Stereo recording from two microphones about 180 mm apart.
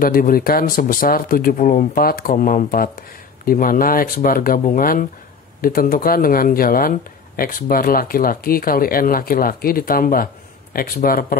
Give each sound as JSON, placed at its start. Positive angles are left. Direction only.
{"t": 0.0, "sound": "speech", "side_deg": 55}